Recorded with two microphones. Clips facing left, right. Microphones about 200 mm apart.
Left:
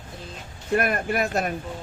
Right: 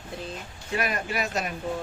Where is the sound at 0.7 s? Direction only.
55° left (ahead or behind).